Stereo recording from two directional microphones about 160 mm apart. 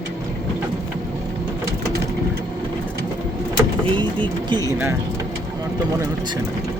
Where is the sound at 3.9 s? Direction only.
30° right (ahead or behind).